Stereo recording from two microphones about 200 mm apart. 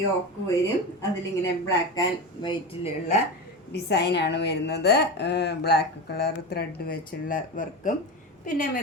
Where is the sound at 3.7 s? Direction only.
55° left (ahead or behind); by 7.9 s 40° left (ahead or behind).